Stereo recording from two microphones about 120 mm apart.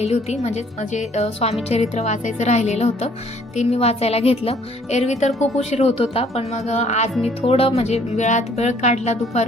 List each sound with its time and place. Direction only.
0.0 s speech: 60° left (ahead or behind)
7.2 s speech: 50° left (ahead or behind); by 9.4 s 70° left (ahead or behind)